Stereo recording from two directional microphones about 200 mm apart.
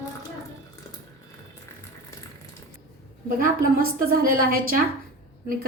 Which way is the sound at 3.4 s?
45° right (ahead or behind).